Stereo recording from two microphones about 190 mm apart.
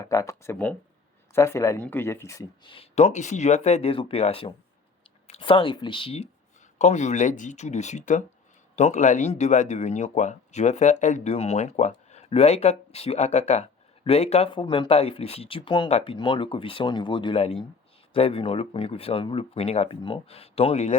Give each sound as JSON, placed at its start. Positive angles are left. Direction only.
{"t": 0.0, "sound": "speech", "side_deg": 15}